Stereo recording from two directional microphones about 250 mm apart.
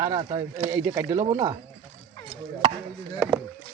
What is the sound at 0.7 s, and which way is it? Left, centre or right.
Speech, centre.